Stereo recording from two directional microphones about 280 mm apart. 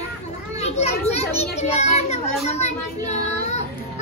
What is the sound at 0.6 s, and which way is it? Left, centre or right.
Children playing, left.